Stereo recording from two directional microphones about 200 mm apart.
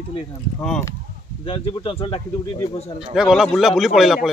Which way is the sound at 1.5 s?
25° left (ahead or behind).